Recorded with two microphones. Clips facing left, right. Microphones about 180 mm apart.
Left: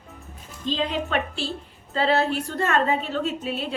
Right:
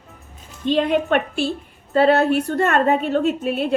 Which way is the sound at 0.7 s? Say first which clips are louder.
Right 8 dB; 60° right (ahead or behind).